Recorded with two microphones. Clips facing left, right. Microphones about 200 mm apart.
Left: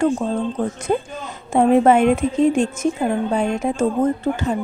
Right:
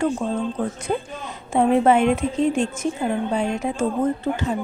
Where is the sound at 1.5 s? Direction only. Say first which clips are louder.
Left 3 dB; 50° left (ahead or behind).